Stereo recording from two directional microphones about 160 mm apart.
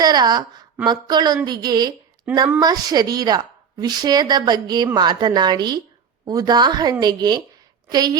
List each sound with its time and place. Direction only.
0.0 s a woman's voice: 25° right (ahead or behind)